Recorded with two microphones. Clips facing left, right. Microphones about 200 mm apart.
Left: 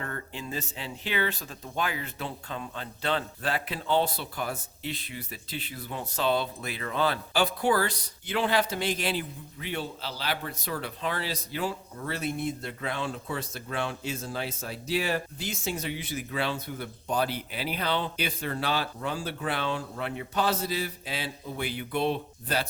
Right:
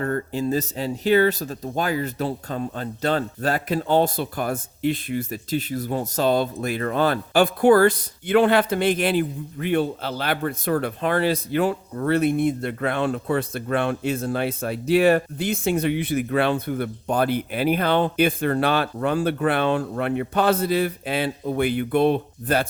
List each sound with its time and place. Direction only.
0.0 s speech: 40° right (ahead or behind)